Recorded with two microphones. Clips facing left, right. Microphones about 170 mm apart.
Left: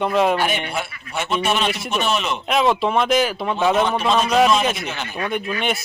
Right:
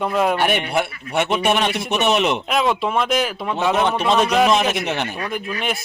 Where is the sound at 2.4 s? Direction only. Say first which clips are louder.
Left 1 dB; centre (ahead or behind).